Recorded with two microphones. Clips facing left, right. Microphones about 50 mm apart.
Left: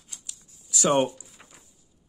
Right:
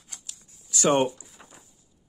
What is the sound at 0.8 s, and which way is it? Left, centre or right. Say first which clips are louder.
Speech: right 1 dB; centre.